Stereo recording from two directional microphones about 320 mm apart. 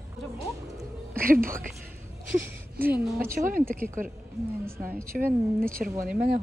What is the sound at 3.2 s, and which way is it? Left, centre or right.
Speech, right.